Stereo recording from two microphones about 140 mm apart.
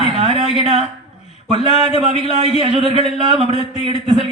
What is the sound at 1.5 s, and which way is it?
A man's voice, 50° right (ahead or behind).